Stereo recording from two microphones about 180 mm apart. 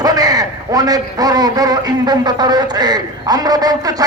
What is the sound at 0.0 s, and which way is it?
A man's voice, 20° right (ahead or behind).